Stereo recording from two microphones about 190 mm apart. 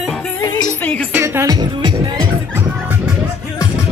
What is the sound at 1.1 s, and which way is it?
Music, 10° right (ahead or behind).